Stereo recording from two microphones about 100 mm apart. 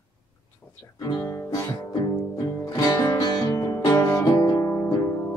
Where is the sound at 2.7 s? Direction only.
40° left (ahead or behind).